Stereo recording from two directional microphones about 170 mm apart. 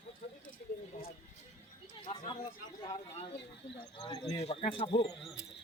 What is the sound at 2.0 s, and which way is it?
Speech, 35° left (ahead or behind).